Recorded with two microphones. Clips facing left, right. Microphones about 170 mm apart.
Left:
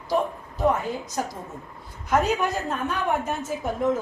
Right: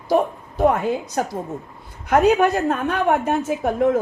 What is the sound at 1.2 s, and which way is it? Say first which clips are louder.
A woman's voice: right 6 dB; 70° right (ahead or behind).